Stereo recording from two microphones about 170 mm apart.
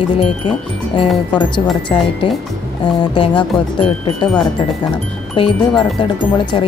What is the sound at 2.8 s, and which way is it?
Speech, 25° left (ahead or behind).